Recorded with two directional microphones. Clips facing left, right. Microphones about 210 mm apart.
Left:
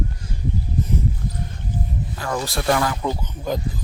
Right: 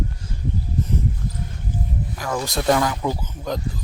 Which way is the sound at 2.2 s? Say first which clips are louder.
Even; 5° right (ahead or behind).